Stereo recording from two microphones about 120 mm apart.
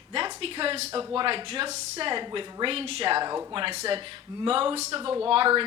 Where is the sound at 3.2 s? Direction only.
40° right (ahead or behind).